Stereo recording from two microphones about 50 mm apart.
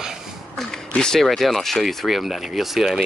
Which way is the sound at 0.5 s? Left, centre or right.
Centre.